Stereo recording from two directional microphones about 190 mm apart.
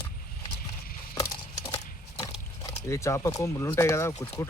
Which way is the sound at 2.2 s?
15° left (ahead or behind).